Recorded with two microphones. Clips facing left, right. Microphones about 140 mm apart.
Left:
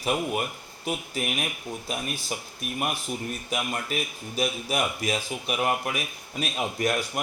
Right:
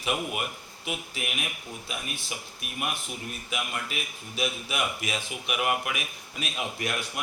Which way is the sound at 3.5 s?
40° left (ahead or behind).